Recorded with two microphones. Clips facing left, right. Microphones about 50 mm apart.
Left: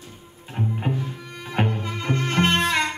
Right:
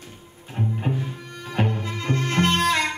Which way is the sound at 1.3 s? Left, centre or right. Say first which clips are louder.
Left 1 dB; centre.